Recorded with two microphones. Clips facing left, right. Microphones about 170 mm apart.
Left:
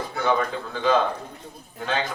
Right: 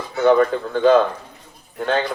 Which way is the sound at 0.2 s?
55° right (ahead or behind).